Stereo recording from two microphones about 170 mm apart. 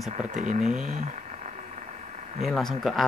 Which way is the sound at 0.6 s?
Centre (ahead or behind).